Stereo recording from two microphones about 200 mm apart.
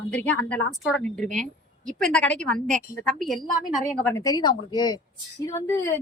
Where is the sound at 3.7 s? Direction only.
10° left (ahead or behind).